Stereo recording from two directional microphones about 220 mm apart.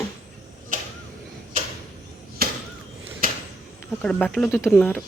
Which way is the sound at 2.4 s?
45° right (ahead or behind).